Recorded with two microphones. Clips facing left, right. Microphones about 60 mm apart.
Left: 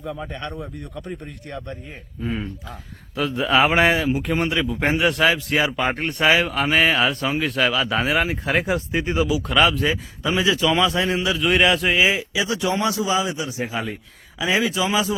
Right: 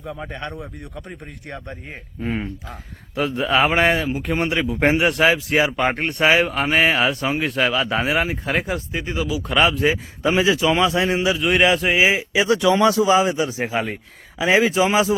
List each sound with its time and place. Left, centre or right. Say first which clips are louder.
0.0 s a man's voice: even; centre
1.5 s speech: left 1 dB; right
2.2 s speech: right 2 dB; right
3.2 s a man's voice: even; centre
9.0 s speech: left 3 dB; centre
9.5 s a man's voice: right 1 dB; centre
10.2 s a man's voice: right 2 dB; right; by 12.0 s centre
12.5 s speech: right 8 dB; right
13.1 s speech: right 5 dB; right